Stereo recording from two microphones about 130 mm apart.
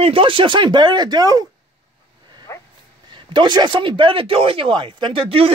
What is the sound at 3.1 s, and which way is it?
Speech, 35° right (ahead or behind).